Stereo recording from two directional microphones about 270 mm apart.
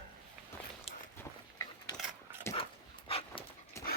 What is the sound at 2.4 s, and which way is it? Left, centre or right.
Dog, centre.